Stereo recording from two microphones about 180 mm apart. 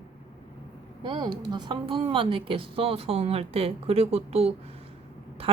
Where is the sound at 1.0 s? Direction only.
25° right (ahead or behind).